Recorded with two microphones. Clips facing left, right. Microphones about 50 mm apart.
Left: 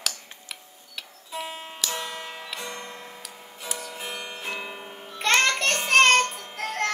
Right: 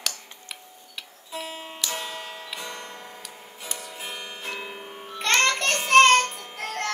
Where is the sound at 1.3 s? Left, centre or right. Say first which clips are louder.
Left 1 dB; centre.